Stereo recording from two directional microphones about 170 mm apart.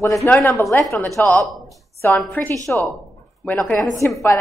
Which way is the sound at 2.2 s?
10° left (ahead or behind).